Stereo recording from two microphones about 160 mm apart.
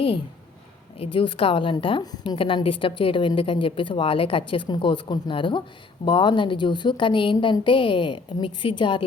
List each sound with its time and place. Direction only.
0.9 s a woman's voice: 35° left (ahead or behind)